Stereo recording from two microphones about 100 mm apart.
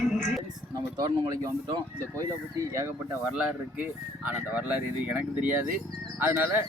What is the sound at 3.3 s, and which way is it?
Speech, 15° right (ahead or behind).